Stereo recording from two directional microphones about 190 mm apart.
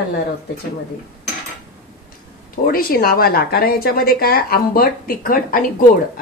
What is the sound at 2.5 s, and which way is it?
A woman's voice, 50° left (ahead or behind).